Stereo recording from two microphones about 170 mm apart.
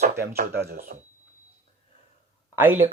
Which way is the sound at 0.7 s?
60° right (ahead or behind).